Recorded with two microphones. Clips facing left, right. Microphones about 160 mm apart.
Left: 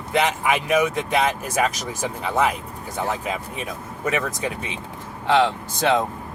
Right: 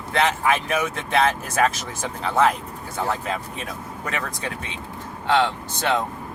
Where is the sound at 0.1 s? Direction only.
15° left (ahead or behind).